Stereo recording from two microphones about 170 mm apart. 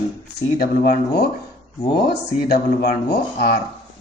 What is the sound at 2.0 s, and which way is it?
Speech, 70° left (ahead or behind).